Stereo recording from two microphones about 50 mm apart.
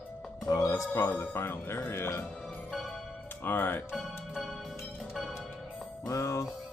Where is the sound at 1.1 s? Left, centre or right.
Left.